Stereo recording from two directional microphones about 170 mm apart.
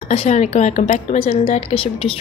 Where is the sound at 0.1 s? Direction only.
40° left (ahead or behind).